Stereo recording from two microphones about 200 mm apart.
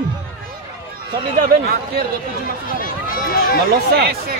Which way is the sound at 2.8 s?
45° left (ahead or behind).